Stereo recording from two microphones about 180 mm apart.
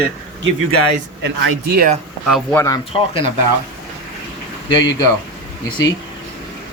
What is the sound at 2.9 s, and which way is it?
Speech, 30° left (ahead or behind).